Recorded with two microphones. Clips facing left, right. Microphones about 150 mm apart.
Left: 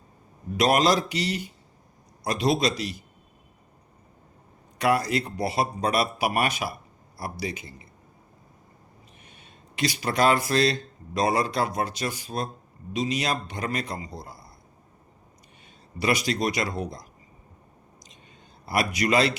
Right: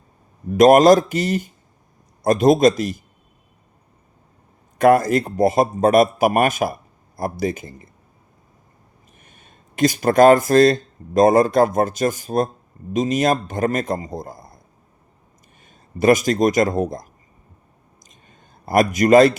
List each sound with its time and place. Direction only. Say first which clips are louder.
0.5 s a man's voice: right 11 dB; 50° right (ahead or behind)
4.8 s a man's voice: right 9 dB; 50° right (ahead or behind)
9.2 s a man's voice: even; 45° right (ahead or behind)
16.0 s a man's voice: right 10 dB; 45° right (ahead or behind)
18.3 s a man's voice: right 8 dB; 45° right (ahead or behind)